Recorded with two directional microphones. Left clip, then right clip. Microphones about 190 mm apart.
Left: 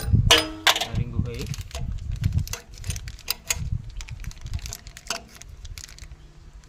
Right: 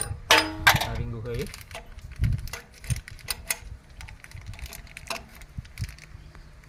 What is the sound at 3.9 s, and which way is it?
Typing, 55° left (ahead or behind).